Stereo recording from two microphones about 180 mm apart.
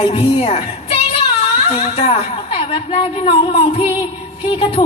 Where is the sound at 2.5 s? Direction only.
30° left (ahead or behind).